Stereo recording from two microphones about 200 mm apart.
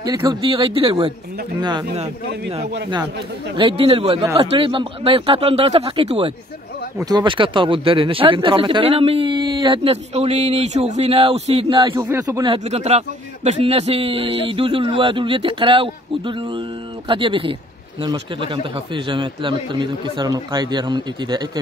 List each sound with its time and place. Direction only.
0.0 s a man's voice: 20° right (ahead or behind)
3.5 s a man's voice: 25° right (ahead or behind)
11.8 s speech: 15° right (ahead or behind)
12.6 s a man's voice: 35° right (ahead or behind)